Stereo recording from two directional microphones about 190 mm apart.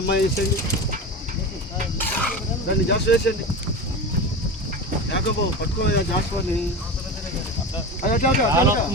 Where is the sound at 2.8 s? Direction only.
60° left (ahead or behind).